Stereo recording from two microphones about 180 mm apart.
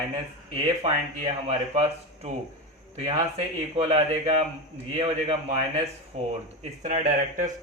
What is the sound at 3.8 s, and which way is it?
A man's voice, 35° right (ahead or behind).